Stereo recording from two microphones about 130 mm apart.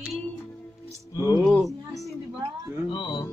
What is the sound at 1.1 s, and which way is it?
Music, 30° left (ahead or behind).